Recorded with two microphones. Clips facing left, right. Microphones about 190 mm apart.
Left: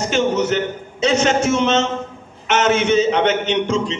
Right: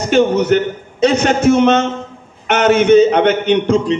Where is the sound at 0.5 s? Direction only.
50° right (ahead or behind).